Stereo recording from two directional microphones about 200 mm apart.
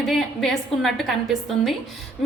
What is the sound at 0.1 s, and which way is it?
A woman's voice, centre (ahead or behind).